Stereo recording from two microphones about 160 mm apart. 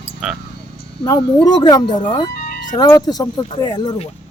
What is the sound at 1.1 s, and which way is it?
Speech, 25° left (ahead or behind).